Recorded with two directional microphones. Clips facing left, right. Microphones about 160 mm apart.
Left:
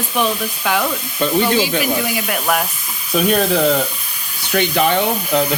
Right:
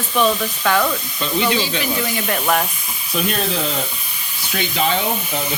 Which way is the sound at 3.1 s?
55° left (ahead or behind).